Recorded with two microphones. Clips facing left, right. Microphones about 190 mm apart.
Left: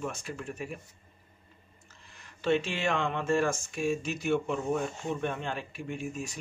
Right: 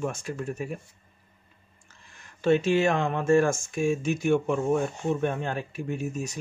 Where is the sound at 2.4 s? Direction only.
45° right (ahead or behind).